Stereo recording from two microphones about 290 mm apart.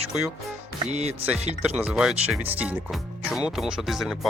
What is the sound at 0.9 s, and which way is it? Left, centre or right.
Music, right.